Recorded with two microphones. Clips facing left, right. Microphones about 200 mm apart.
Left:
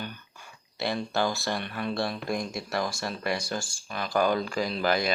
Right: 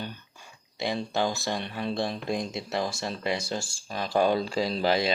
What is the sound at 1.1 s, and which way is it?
Speech, 20° right (ahead or behind).